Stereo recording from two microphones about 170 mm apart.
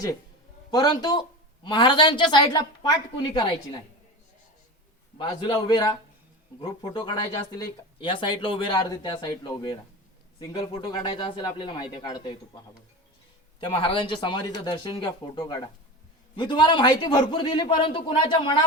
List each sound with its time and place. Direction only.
0.7 s a man's voice: 25° left (ahead or behind)
5.1 s a man's voice: 30° left (ahead or behind)
13.6 s a man's voice: 30° left (ahead or behind)